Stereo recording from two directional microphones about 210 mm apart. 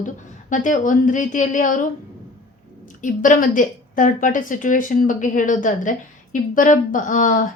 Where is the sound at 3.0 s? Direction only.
40° left (ahead or behind).